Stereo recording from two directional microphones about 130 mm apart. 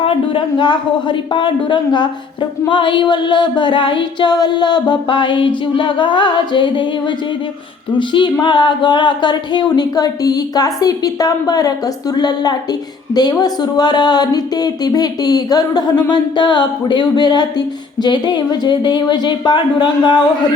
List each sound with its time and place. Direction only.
0.0 s music: 40° left (ahead or behind)
7.9 s music: 35° left (ahead or behind)